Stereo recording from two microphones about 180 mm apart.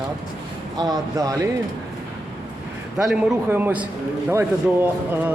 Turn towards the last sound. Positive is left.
turn(degrees=-15)  # may be behind; listen again after turning